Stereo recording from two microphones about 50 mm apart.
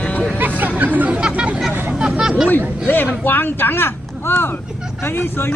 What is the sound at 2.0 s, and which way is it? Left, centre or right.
Hubbub, centre.